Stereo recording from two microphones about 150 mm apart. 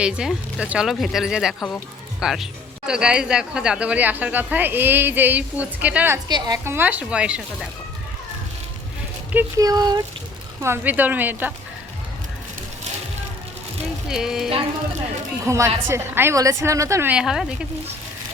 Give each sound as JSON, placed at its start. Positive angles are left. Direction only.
{"t": 0.0, "sound": "speech", "side_deg": -5}
{"t": 6.2, "sound": "speech", "side_deg": -30}
{"t": 6.7, "sound": "speech", "side_deg": -10}
{"t": 9.6, "sound": "speech", "side_deg": -25}
{"t": 10.6, "sound": "speech", "side_deg": -15}
{"t": 14.1, "sound": "speech", "side_deg": -5}
{"t": 15.4, "sound": "speech", "side_deg": -20}